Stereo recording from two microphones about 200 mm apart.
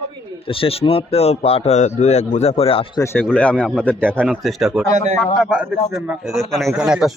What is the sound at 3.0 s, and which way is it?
A man's voice, 10° left (ahead or behind).